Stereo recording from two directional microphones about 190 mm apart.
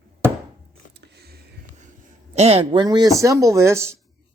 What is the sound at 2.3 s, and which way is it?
Speech, 35° right (ahead or behind).